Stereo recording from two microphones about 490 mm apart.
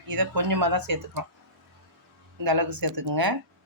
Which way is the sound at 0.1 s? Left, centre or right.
Right.